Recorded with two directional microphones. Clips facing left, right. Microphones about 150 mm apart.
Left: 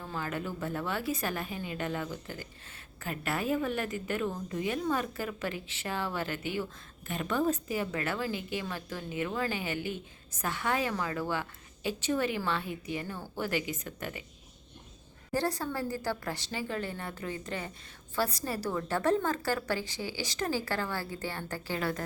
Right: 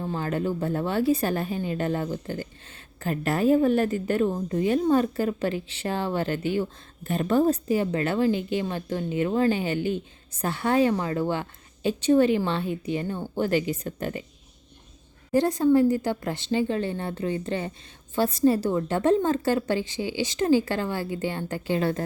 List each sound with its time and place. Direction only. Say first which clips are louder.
0.0 s a woman's voice: right 8 dB; 30° right (ahead or behind)
15.3 s a woman's voice: right 12 dB; 20° right (ahead or behind)